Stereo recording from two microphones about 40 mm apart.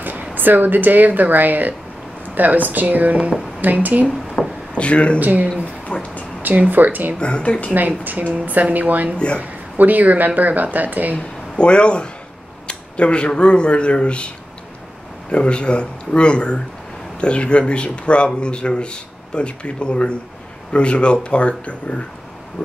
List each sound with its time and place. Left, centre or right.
0.0 s speech: right
4.4 s a sound: centre
4.7 s speech: left
5.2 s speech: right
5.9 s a sound: left
6.4 s speech: right
7.2 s speech: left
7.7 s speech: right
11.1 s speech: left
12.6 s a sound: left
13.4 s speech: left
15.3 s speech: left